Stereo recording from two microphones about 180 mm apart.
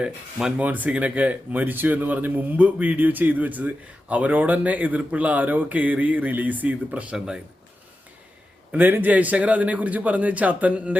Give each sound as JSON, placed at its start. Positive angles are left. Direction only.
{"t": 0.0, "sound": "speech", "side_deg": -5}
{"t": 8.7, "sound": "speech", "side_deg": -10}